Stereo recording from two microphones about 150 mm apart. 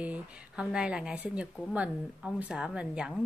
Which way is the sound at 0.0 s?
5° right (ahead or behind).